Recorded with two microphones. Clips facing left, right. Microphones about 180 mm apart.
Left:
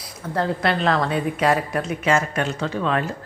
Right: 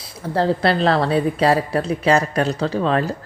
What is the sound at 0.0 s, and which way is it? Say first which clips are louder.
A woman's voice: right 4 dB; 30° right (ahead or behind).